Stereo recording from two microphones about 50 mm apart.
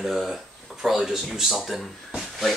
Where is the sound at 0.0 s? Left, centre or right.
Centre.